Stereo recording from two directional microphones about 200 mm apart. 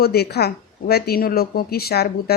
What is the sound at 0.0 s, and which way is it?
Speech, 50° left (ahead or behind).